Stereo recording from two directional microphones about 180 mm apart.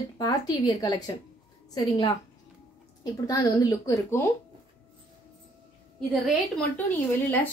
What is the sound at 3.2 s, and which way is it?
A woman's voice, 20° left (ahead or behind).